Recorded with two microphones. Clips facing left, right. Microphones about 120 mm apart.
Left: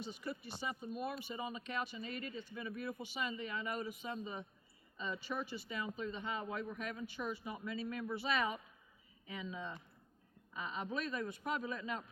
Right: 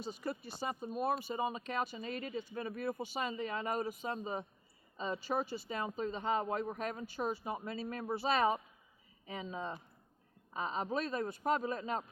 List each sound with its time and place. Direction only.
0.0 s speech: 40° right (ahead or behind)